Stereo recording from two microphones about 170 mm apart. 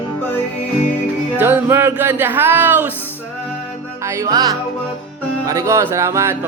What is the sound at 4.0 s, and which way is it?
Music, 15° right (ahead or behind).